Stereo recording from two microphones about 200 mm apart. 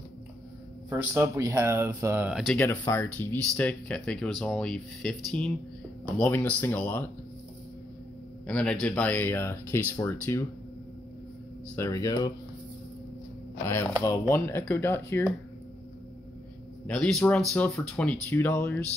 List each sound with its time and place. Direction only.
0.8 s speech: 10° right (ahead or behind)
2.6 s speech: 10° left (ahead or behind)
8.5 s speech: 5° left (ahead or behind)
11.7 s speech: 15° left (ahead or behind)
13.7 s speech: 10° left (ahead or behind)
16.8 s speech: 5° left (ahead or behind)